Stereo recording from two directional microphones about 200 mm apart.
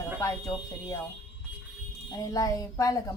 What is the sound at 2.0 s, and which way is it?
Speech, 20° left (ahead or behind).